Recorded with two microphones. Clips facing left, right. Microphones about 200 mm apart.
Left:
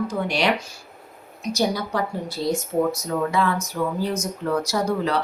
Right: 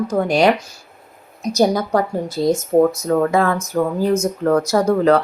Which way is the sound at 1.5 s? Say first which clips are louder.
Right 7 dB; 45° right (ahead or behind).